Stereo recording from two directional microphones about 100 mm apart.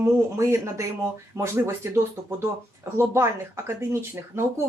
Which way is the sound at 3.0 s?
25° right (ahead or behind).